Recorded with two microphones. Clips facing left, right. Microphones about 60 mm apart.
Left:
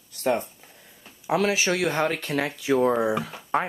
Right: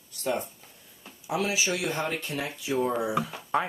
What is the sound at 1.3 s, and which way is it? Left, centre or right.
Speech, left.